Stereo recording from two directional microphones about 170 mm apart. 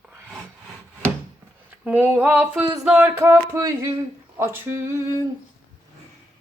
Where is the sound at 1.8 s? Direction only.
10° right (ahead or behind).